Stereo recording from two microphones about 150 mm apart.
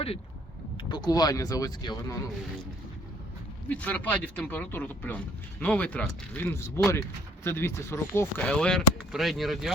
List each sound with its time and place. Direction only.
0.8 s speech: 30° left (ahead or behind)
3.7 s speech: 10° left (ahead or behind)